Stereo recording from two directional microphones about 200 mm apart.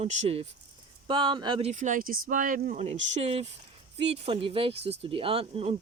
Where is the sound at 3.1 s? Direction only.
30° right (ahead or behind).